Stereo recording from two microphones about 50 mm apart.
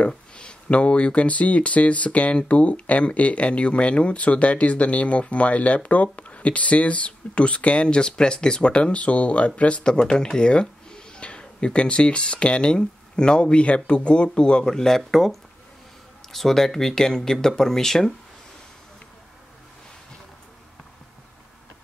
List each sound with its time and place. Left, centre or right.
0.0 s speech: centre